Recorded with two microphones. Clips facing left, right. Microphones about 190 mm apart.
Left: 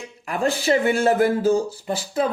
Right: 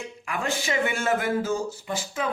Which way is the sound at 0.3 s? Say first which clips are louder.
Left 8 dB; 35° left (ahead or behind).